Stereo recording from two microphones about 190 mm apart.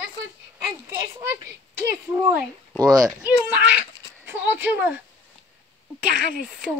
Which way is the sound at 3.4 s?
5° right (ahead or behind).